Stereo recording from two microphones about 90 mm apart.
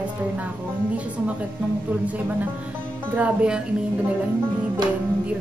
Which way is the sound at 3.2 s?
10° right (ahead or behind).